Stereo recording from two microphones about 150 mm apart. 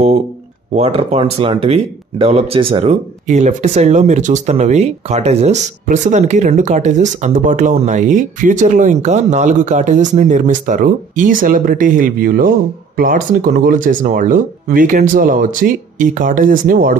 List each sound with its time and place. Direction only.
0.7 s speech: 45° right (ahead or behind); by 16.9 s 65° right (ahead or behind)